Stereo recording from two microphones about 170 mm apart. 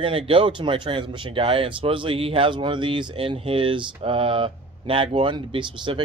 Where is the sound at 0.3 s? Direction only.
30° right (ahead or behind).